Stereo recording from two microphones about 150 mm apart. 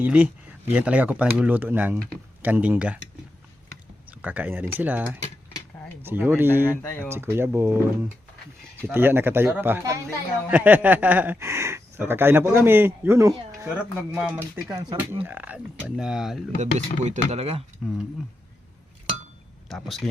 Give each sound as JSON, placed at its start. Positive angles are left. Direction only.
{"t": 0.0, "sound": "speech", "side_deg": -10}
{"t": 4.2, "sound": "speech", "side_deg": -10}
{"t": 6.7, "sound": "speech", "side_deg": 15}
{"t": 7.1, "sound": "speech", "side_deg": -15}
{"t": 8.9, "sound": "speech", "side_deg": -15}
{"t": 14.1, "sound": "speech", "side_deg": -5}
{"t": 16.6, "sound": "speech", "side_deg": -50}
{"t": 17.8, "sound": "speech", "side_deg": 0}
{"t": 19.6, "sound": "speech", "side_deg": 0}